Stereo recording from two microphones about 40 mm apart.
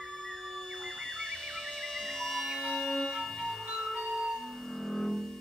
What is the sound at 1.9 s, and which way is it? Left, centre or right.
Music, centre.